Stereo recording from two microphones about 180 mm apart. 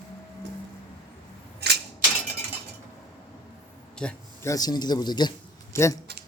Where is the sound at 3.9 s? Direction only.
5° left (ahead or behind).